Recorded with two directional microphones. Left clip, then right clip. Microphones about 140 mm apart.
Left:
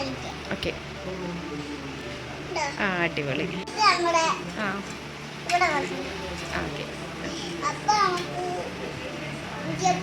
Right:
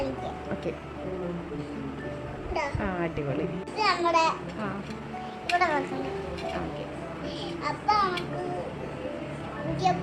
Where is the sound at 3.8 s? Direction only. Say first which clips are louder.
Left 3 dB; 40° right (ahead or behind).